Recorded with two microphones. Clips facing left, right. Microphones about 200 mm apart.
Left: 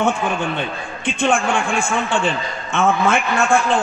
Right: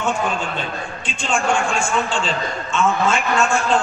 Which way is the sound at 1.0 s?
60° left (ahead or behind).